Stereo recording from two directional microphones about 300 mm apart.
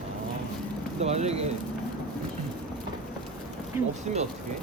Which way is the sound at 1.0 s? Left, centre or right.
Right.